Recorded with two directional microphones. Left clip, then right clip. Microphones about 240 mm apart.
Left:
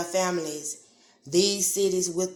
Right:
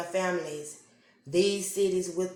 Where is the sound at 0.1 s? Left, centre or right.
Left.